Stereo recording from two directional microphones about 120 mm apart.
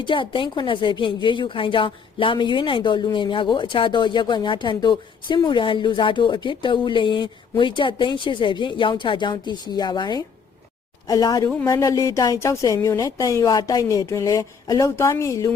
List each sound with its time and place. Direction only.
0.0 s a woman's voice: 45° left (ahead or behind); by 15.5 s 25° left (ahead or behind)